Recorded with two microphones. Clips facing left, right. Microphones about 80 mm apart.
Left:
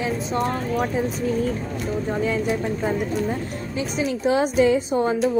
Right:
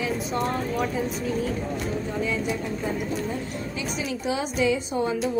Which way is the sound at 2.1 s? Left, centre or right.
Left.